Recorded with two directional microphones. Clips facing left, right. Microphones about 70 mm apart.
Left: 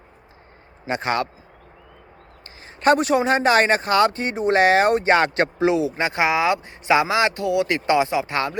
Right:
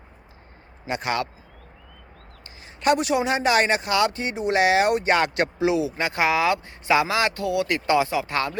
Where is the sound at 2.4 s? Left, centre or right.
Left.